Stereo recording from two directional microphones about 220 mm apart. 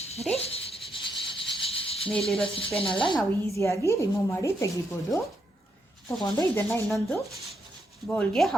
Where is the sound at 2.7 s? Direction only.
25° left (ahead or behind).